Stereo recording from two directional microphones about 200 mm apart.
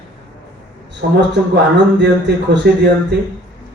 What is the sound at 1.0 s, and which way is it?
Speech, 55° right (ahead or behind).